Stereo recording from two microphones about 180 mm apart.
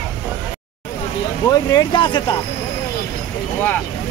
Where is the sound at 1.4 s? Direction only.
25° left (ahead or behind).